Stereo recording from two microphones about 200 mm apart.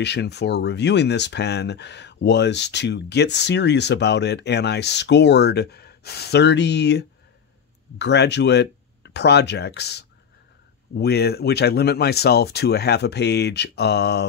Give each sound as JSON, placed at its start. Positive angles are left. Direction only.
{"t": 0.0, "sound": "speech", "side_deg": 60}